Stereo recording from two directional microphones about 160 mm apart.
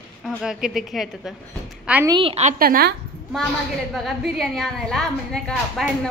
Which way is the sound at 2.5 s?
65° right (ahead or behind).